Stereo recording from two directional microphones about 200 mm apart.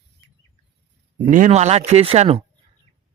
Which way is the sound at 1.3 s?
40° right (ahead or behind).